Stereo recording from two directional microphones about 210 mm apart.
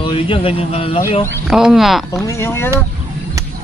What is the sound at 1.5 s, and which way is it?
Speech, 5° right (ahead or behind).